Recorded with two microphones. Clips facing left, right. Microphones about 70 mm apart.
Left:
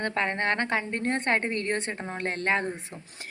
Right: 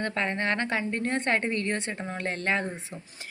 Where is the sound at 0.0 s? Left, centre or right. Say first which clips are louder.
Left 1 dB; left.